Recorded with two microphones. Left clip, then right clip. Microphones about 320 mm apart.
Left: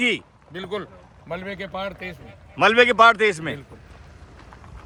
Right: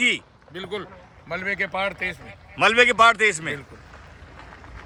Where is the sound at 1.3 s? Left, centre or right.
Centre.